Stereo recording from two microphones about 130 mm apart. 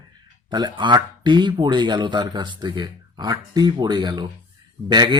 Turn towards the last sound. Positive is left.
turn(degrees=-35)  # may be behind; listen again after turning